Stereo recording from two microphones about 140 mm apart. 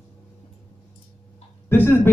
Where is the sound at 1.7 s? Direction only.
15° left (ahead or behind).